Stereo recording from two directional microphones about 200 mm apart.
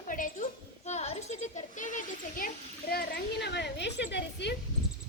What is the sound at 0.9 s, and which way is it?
Children playing, 35° left (ahead or behind).